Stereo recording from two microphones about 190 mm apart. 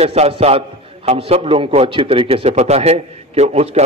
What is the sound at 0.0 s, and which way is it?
A man's voice, 35° right (ahead or behind).